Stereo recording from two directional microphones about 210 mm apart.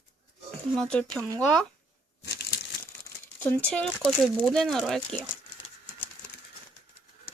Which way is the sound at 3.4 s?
10° left (ahead or behind).